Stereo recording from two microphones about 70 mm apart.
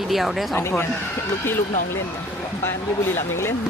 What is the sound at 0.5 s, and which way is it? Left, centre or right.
Speech, left.